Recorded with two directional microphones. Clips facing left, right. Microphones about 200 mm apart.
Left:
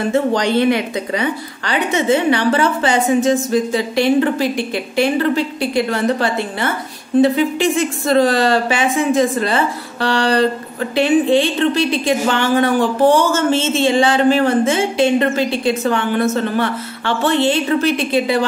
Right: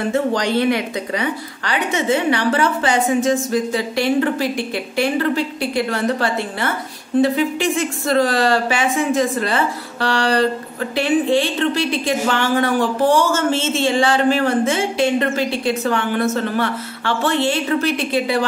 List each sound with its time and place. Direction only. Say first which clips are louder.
0.1 s a woman's voice: left 3 dB; 25° left (ahead or behind)